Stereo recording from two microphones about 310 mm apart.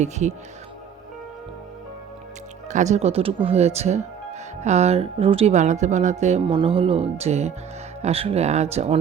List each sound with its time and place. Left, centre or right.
0.0 s a woman's voice: right
2.6 s a woman's voice: right